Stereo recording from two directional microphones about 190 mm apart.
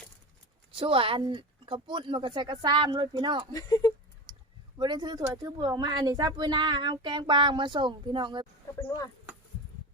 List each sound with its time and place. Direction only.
0.7 s speech: 30° right (ahead or behind)
3.5 s speech: 20° left (ahead or behind)
4.3 s clicking: 25° right (ahead or behind)
4.8 s speech: 20° right (ahead or behind)